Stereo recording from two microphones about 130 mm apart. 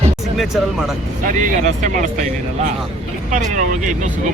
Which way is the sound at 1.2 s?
80° right.